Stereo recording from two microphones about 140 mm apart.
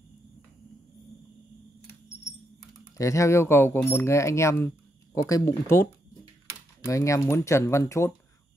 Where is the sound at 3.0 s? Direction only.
20° left (ahead or behind).